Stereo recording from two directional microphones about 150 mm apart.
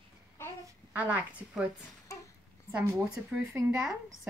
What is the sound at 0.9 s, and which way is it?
Speech, 10° right (ahead or behind).